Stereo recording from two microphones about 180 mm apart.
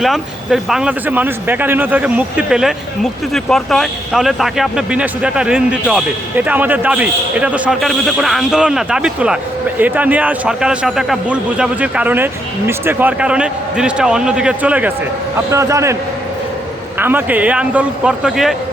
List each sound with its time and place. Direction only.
0.0 s a man's voice: centre (ahead or behind)
17.0 s a man's voice: 10° right (ahead or behind)